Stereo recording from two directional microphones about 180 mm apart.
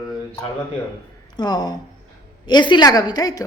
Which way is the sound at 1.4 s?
25° left (ahead or behind).